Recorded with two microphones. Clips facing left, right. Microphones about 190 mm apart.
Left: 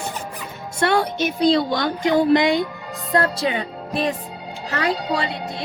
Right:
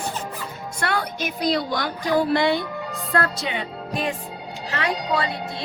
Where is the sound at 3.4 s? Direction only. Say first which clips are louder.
Left 5 dB; 35° left (ahead or behind).